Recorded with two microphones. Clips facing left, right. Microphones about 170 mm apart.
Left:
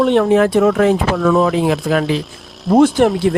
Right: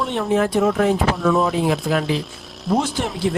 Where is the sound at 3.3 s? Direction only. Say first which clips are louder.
Left 6 dB; 60° left (ahead or behind).